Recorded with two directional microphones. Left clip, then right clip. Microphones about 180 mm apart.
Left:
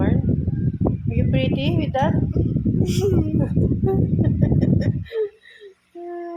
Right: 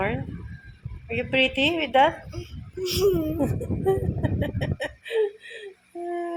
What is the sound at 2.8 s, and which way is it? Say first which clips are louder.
Speech: right 2 dB; 15° left (ahead or behind).